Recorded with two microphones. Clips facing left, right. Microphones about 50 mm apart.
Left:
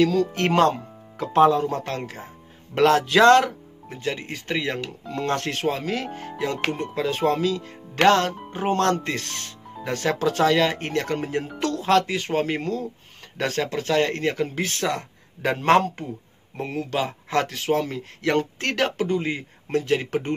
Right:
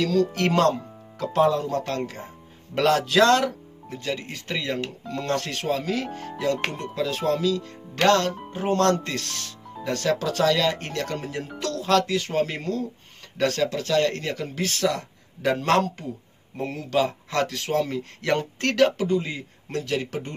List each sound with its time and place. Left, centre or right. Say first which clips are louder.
0.0 s speech: left 2 dB; left
2.7 s speech: left 3 dB; left
4.0 s speech: left 2 dB; left
5.5 s speech: left 1 dB; left
7.2 s speech: left 1 dB; left
7.7 s speech: left 3 dB; centre
13.4 s speech: right 2 dB; left
16.6 s speech: right 2 dB; centre
17.8 s speech: even; centre
18.9 s speech: left 1 dB; left